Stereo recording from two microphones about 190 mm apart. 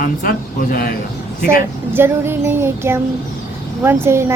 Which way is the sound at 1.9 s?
10° right (ahead or behind).